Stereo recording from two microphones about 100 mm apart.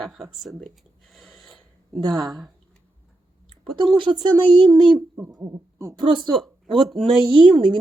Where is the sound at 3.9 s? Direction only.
55° right (ahead or behind).